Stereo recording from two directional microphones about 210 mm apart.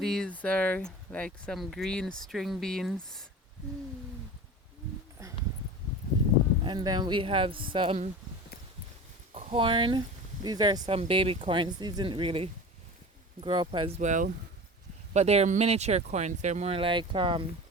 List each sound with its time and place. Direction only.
0.0 s speech: centre (ahead or behind)
5.2 s a sound: 15° right (ahead or behind)
6.7 s speech: 20° right (ahead or behind)
9.3 s speech: 25° right (ahead or behind)